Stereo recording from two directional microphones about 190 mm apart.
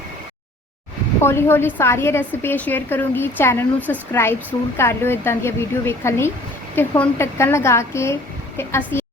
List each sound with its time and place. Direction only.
1.2 s a woman's voice: 15° left (ahead or behind)